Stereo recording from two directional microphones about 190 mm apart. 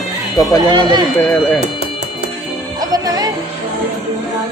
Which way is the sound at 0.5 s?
20° right (ahead or behind).